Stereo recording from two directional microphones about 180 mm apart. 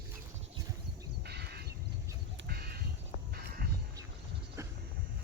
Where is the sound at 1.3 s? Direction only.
65° right (ahead or behind).